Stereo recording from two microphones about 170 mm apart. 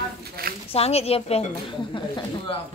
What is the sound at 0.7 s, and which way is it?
Speech, 35° left (ahead or behind).